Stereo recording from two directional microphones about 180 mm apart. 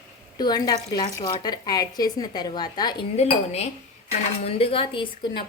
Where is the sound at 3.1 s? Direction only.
35° left (ahead or behind).